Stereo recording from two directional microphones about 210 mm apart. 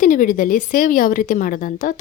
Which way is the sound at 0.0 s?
40° left (ahead or behind).